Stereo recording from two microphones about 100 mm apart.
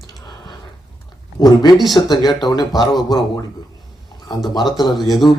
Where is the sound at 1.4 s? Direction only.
40° left (ahead or behind).